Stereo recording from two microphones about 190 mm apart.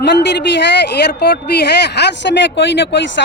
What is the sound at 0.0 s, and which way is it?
Speech, 65° left (ahead or behind).